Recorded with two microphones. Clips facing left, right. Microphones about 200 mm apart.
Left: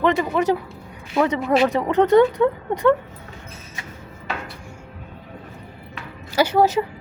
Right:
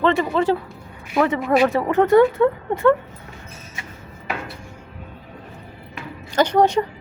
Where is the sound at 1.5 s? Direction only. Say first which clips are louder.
Right 1 dB; 15° left (ahead or behind).